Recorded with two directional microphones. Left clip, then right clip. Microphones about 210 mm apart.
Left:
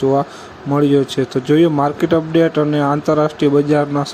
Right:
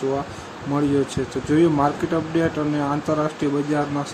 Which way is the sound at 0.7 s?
30° left (ahead or behind).